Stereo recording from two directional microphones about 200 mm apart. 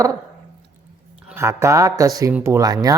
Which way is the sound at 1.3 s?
15° right (ahead or behind).